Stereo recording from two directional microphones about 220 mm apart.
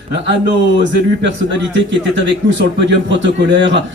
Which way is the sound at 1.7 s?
55° right (ahead or behind).